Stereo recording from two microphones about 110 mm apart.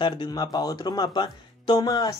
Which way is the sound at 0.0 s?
40° left (ahead or behind).